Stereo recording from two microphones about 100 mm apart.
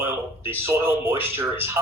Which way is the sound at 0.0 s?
25° right (ahead or behind).